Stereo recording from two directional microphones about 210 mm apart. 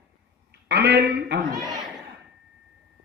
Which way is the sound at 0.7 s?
50° right (ahead or behind).